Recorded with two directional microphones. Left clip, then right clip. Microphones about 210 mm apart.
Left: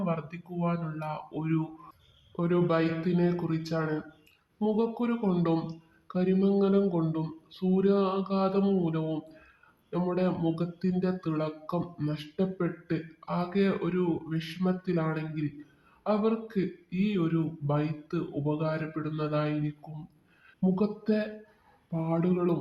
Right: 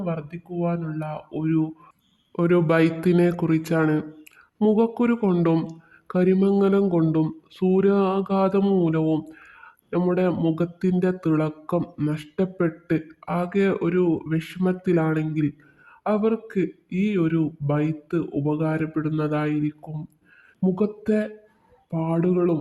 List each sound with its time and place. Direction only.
0.0 s speech: 45° right (ahead or behind)
2.3 s speech: 60° right (ahead or behind)
4.6 s speech: 55° right (ahead or behind)
16.9 s speech: 55° right (ahead or behind)